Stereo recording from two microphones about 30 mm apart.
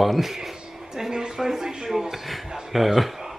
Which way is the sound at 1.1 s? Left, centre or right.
Right.